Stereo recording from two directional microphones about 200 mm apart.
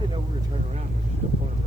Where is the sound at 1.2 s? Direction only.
30° right (ahead or behind).